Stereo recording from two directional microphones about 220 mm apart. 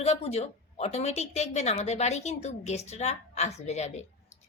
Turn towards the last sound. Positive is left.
turn(degrees=30)  # may be behind; listen again after turning